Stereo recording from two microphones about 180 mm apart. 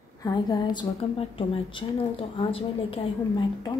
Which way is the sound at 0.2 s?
25° left (ahead or behind).